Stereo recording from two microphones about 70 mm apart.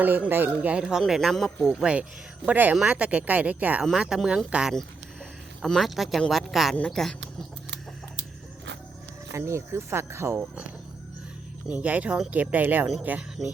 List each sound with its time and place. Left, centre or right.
0.0 s speech: right; by 1.5 s centre
1.6 s speech: centre
3.9 s speech: centre
5.6 s speech: centre
6.7 s speech: centre
9.3 s speech: right
11.7 s speech: right